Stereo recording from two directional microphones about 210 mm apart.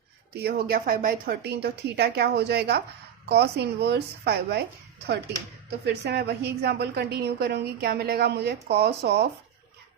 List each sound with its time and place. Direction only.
0.4 s a woman's voice: 45° right (ahead or behind)
5.8 s a woman's voice: 50° right (ahead or behind)